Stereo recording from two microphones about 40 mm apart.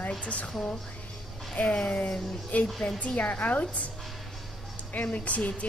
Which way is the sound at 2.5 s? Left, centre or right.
Left.